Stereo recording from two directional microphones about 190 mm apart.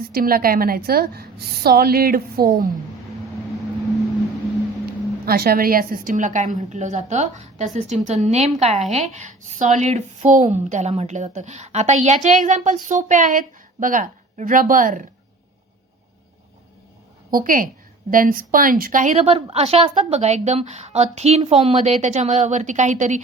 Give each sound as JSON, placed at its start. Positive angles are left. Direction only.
{"t": 0.0, "sound": "a woman's voice", "side_deg": -50}
{"t": 5.2, "sound": "a woman's voice", "side_deg": -55}
{"t": 17.3, "sound": "a woman's voice", "side_deg": -45}